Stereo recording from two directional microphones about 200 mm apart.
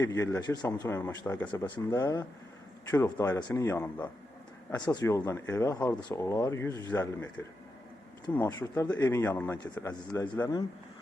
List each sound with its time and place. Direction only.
0.0 s speech: 15° left (ahead or behind)